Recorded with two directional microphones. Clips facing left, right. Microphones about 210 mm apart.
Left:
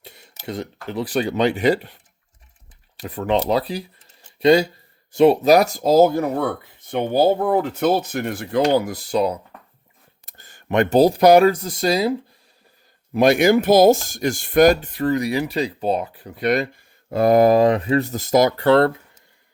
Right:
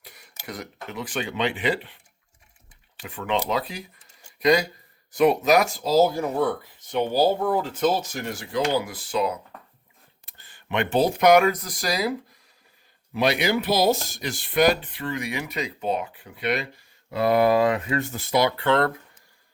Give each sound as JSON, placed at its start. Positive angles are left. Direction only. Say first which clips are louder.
{"t": 0.0, "sound": "a sound", "louder": "left 5 dB", "side_deg": 25}
{"t": 0.4, "sound": "speech", "louder": "left 7 dB", "side_deg": 30}
{"t": 3.0, "sound": "speech", "louder": "left 6 dB", "side_deg": 40}
{"t": 4.0, "sound": "a sound", "louder": "left 1 dB", "side_deg": -10}
{"t": 4.4, "sound": "speech", "louder": "left 6 dB", "side_deg": 30}
{"t": 8.6, "sound": "speech", "louder": "left 6 dB", "side_deg": 45}
{"t": 13.1, "sound": "speech", "louder": "left 8 dB", "side_deg": 45}